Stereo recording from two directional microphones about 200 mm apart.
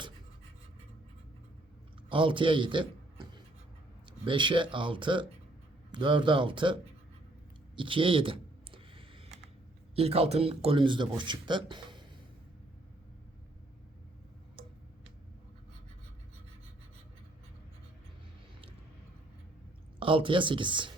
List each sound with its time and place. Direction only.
2.0 s a man's voice: 25° right (ahead or behind)
7.8 s a sound: 25° right (ahead or behind)
9.9 s speech: 30° right (ahead or behind)
20.0 s speech: 25° right (ahead or behind)